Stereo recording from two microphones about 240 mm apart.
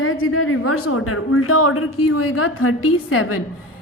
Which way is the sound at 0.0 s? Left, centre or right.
Left.